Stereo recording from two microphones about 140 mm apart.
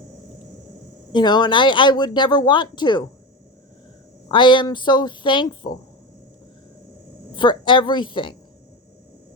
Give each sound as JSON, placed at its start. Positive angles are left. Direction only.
{"t": 1.1, "sound": "speech", "side_deg": 30}
{"t": 4.3, "sound": "speech", "side_deg": 35}
{"t": 7.3, "sound": "speech", "side_deg": 35}